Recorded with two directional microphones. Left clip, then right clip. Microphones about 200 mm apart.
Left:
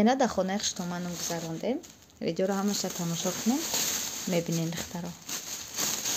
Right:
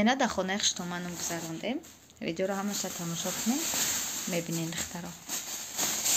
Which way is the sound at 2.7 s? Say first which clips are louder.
Left 3 dB; 55° left (ahead or behind).